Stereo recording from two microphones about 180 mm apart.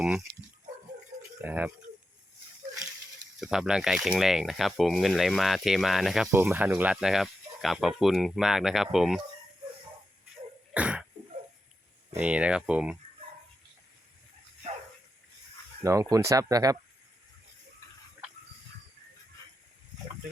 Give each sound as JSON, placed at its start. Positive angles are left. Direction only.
{"t": 0.0, "sound": "speech", "side_deg": -5}
{"t": 1.4, "sound": "speech", "side_deg": -10}
{"t": 3.4, "sound": "speech", "side_deg": -5}
{"t": 6.3, "sound": "speech", "side_deg": -10}
{"t": 10.8, "sound": "cough", "side_deg": -5}
{"t": 12.1, "sound": "speech", "side_deg": -5}
{"t": 15.8, "sound": "speech", "side_deg": -15}